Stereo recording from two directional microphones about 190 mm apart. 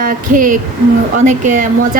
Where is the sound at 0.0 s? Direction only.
45° right (ahead or behind).